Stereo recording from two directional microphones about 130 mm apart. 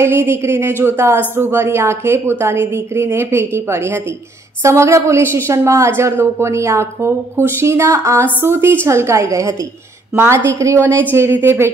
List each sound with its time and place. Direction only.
0.0 s a woman's voice: 20° right (ahead or behind)